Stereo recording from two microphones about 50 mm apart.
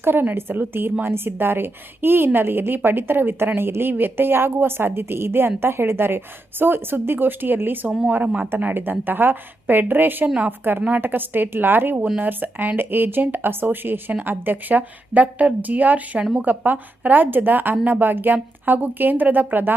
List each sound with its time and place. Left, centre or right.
0.0 s a woman's voice: right
10.2 s a woman's voice: right
10.6 s a woman's voice: right